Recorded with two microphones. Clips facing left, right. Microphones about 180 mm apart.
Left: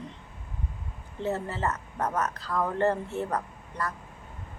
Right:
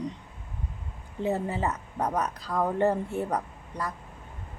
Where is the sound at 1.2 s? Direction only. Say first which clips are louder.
Right 2 dB; 15° right (ahead or behind).